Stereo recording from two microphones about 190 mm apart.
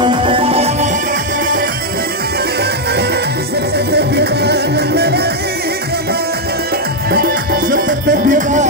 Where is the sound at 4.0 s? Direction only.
60° right (ahead or behind).